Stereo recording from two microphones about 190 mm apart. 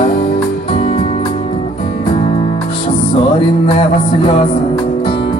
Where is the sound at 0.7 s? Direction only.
30° left (ahead or behind).